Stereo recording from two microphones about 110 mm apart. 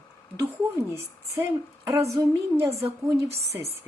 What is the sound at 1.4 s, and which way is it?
Speech, 25° right (ahead or behind).